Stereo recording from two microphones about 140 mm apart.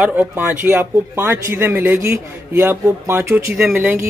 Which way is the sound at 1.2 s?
20° right (ahead or behind).